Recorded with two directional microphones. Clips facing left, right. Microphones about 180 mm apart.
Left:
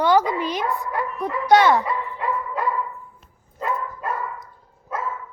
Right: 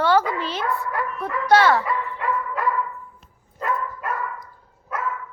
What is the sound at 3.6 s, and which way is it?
Dog, 20° left (ahead or behind).